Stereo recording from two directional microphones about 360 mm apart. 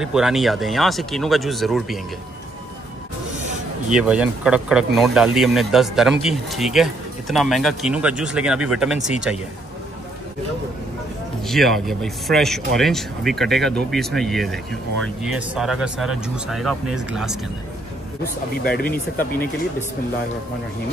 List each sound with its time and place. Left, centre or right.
0.0 s speech: centre
3.9 s speech: centre
11.4 s speech: centre
18.6 s speech: left